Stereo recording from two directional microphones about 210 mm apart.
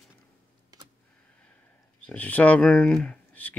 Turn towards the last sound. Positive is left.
turn(degrees=5)  # may be behind; listen again after turning